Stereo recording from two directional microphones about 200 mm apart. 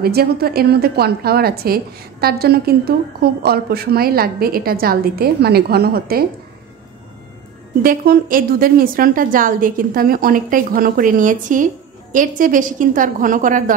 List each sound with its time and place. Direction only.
0.0 s a woman's voice: 50° right (ahead or behind)
7.8 s a woman's voice: 45° right (ahead or behind)